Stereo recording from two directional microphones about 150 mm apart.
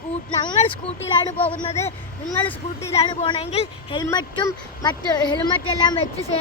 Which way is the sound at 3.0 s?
35° left (ahead or behind).